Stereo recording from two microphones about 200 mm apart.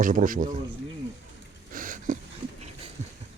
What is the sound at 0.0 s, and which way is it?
Speech, 40° right (ahead or behind).